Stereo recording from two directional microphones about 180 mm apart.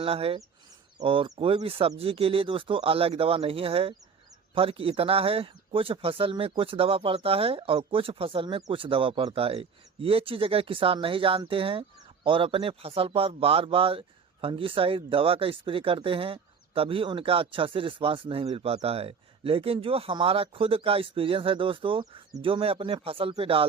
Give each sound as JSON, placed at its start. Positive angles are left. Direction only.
{"t": 0.0, "sound": "speech", "side_deg": -35}